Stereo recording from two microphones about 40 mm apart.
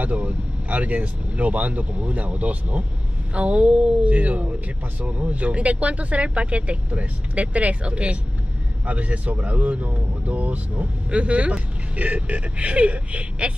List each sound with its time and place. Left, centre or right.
0.0 s speech: right